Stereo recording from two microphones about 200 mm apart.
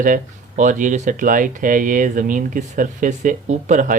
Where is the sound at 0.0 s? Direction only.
40° right (ahead or behind).